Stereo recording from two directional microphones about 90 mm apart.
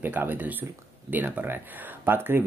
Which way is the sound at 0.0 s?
20° right (ahead or behind).